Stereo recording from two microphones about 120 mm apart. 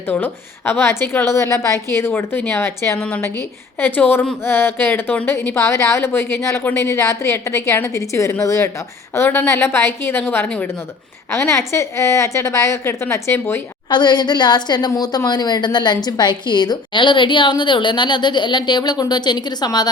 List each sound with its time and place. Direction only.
0.1 s a woman's voice: 15° left (ahead or behind)
13.9 s a woman's voice: 35° left (ahead or behind)